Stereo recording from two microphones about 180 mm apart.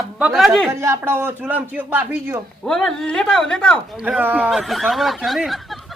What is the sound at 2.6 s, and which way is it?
Speech, 5° left (ahead or behind).